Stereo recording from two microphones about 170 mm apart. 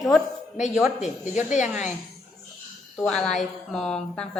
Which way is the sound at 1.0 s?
45° left (ahead or behind).